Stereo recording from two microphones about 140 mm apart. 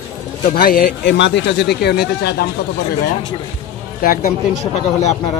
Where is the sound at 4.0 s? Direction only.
85° left.